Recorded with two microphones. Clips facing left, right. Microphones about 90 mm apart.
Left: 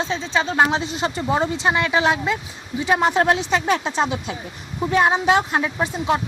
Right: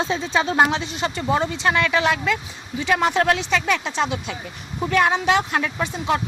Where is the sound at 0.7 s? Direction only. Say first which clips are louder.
Left 2 dB; 35° left (ahead or behind).